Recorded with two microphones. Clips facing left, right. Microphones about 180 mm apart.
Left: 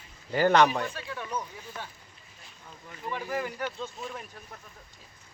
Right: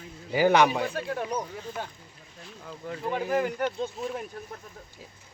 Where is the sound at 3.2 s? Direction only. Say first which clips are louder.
Right 6 dB; 55° right (ahead or behind).